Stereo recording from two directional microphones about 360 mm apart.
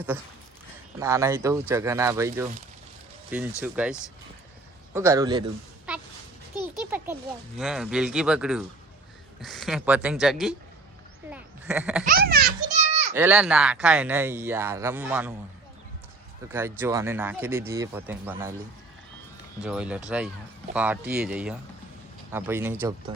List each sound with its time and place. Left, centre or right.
0.9 s speech: centre
3.6 s speech: centre
4.9 s speech: centre
6.6 s a sound: centre
7.6 s speech: centre
12.0 s a child's voice: right
13.1 s speech: centre
16.5 s speech: centre
19.6 s speech: centre